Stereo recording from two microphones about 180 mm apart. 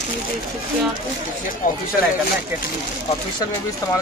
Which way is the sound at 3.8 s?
20° left (ahead or behind).